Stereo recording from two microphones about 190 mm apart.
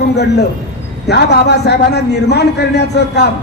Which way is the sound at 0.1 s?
60° left (ahead or behind).